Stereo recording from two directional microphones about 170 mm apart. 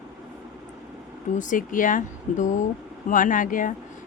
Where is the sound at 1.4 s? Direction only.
50° left (ahead or behind).